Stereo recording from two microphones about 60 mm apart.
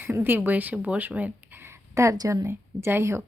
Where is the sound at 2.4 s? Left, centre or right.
Right.